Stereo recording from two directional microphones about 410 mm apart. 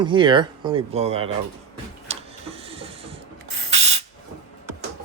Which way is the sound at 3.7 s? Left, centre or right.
Centre.